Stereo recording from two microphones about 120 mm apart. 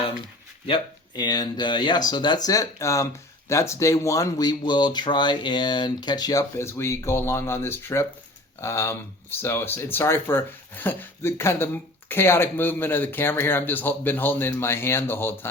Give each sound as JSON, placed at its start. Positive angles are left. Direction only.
{"t": 1.1, "sound": "speech", "side_deg": 35}